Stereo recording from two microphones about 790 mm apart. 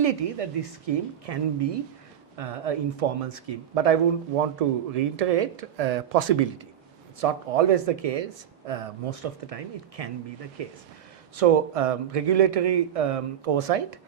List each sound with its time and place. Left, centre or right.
0.0 s speech: right
2.4 s speech: right